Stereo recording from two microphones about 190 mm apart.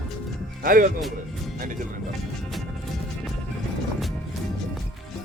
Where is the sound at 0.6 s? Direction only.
50° right (ahead or behind).